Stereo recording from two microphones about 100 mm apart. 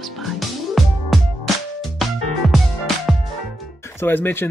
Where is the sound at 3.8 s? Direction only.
25° left (ahead or behind).